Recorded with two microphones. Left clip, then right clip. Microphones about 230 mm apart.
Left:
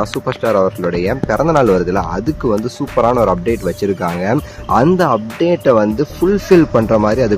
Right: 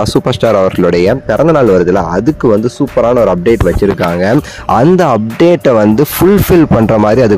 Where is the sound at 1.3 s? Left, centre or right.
Right.